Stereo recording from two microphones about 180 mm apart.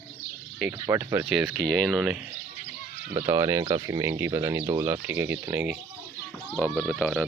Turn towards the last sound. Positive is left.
turn(degrees=5)  # may be behind; listen again after turning